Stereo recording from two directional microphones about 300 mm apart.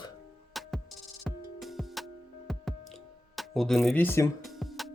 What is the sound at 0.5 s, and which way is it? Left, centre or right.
Music, centre.